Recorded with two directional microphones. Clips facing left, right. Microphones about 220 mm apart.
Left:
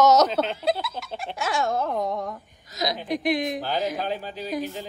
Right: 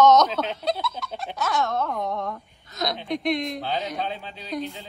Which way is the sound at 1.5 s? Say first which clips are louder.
Left 1 dB; 30° left (ahead or behind).